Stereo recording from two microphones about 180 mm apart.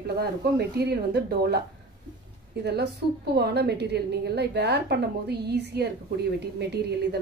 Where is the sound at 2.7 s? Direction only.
65° right (ahead or behind).